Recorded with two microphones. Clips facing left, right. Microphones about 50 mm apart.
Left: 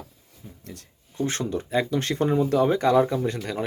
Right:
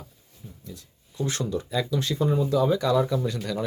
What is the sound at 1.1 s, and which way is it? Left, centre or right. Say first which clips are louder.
Speech: left 1 dB; left.